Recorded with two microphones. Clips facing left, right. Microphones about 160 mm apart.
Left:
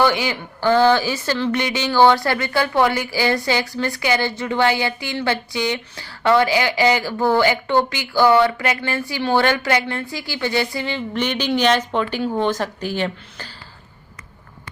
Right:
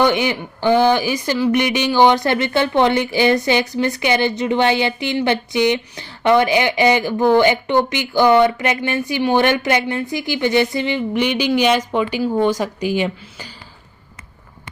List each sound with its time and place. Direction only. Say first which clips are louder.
0.0 s speech: right 2 dB; 20° right (ahead or behind)